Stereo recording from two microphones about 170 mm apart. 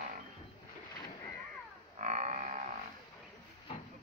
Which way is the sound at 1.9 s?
45° right (ahead or behind).